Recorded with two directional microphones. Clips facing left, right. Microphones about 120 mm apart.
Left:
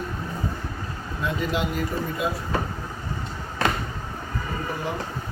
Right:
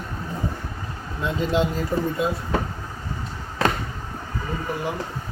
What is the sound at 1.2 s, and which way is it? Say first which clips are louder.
Speech: right 4 dB; 25° right (ahead or behind).